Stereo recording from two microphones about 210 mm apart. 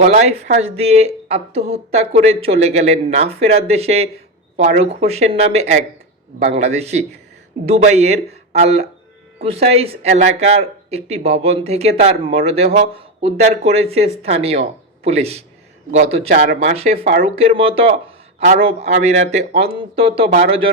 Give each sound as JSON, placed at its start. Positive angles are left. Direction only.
{"t": 0.0, "sound": "speech", "side_deg": -30}